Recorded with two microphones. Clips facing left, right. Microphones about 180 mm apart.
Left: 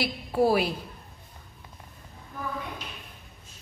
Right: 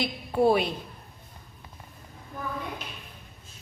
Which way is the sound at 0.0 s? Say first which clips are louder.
Right 1 dB; 5° left (ahead or behind).